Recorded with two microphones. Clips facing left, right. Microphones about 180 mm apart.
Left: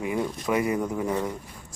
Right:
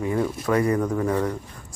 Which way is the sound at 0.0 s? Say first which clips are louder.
Right 3 dB; 15° left (ahead or behind).